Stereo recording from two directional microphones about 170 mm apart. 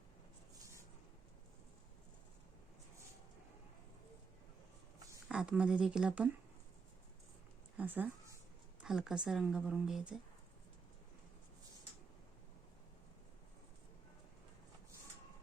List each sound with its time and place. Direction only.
5.3 s speech: 5° right (ahead or behind)
7.8 s a sound: 10° right (ahead or behind)
8.8 s speech: 5° right (ahead or behind)